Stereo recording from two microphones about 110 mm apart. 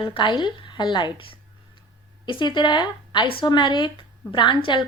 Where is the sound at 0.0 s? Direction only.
50° left (ahead or behind).